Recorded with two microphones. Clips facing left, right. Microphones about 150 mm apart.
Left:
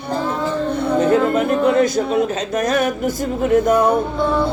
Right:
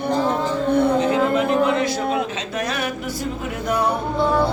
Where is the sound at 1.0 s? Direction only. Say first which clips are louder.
Left 3 dB; 45° left (ahead or behind).